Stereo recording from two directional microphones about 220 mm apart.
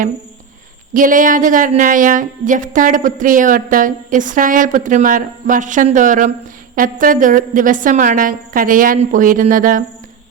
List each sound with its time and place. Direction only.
0.9 s a woman's voice: 35° right (ahead or behind)